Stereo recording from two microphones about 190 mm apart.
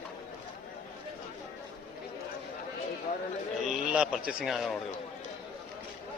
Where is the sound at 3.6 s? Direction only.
5° right (ahead or behind).